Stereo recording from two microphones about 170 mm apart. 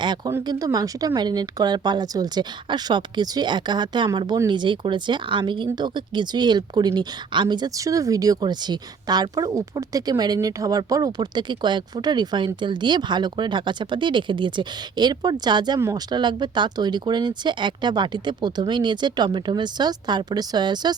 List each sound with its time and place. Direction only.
0.3 s speech: 20° right (ahead or behind)